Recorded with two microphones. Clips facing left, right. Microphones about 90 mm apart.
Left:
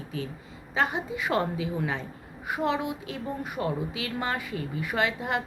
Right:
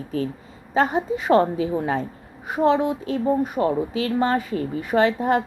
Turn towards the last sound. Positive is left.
turn(degrees=-40)  # may be behind; listen again after turning